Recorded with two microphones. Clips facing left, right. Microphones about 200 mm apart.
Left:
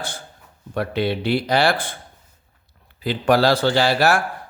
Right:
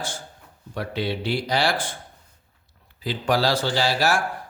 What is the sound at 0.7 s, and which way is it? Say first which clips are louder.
A man's voice: left 5 dB; 60° left (ahead or behind).